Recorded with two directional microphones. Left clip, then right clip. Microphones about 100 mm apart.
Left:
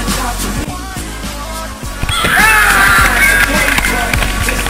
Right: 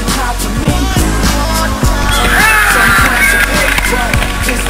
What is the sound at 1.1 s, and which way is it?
Music, 35° left (ahead or behind).